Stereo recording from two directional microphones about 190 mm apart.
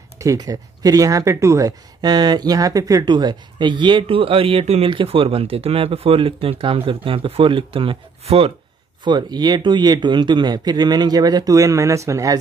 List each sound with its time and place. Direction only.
0.2 s speech: 15° right (ahead or behind)